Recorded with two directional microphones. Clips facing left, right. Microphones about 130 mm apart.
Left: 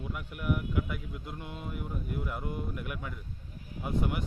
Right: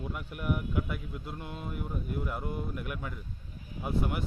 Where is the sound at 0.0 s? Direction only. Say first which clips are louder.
Right 1 dB; 30° right (ahead or behind).